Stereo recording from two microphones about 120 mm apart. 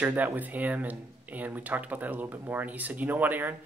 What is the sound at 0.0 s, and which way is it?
Speech, 15° right (ahead or behind).